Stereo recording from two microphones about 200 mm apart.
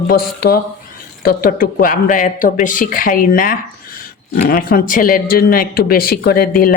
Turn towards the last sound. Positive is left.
turn(degrees=50)  # may be behind; listen again after turning